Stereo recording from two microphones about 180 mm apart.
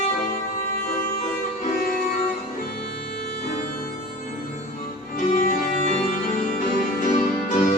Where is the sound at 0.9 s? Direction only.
45° left (ahead or behind).